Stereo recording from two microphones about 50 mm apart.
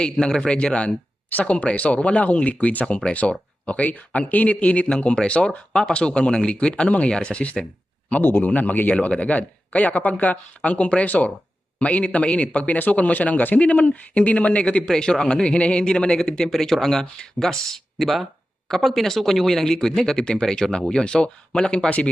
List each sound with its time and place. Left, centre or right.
0.0 s speech: centre
8.2 s speech: left
8.4 s speech: left
9.0 s speech: left
14.8 s speech: centre
21.8 s speech: left